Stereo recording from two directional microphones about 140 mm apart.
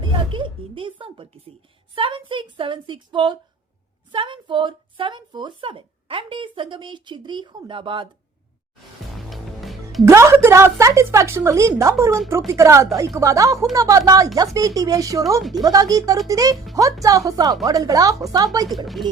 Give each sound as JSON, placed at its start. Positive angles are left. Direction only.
{"t": 0.0, "sound": "a sound", "side_deg": -35}
{"t": 2.0, "sound": "a woman's voice", "side_deg": -35}
{"t": 9.1, "sound": "music", "side_deg": 0}
{"t": 10.1, "sound": "a woman's voice", "side_deg": -20}
{"t": 15.4, "sound": "speech", "side_deg": 0}
{"t": 15.6, "sound": "a woman's voice", "side_deg": -25}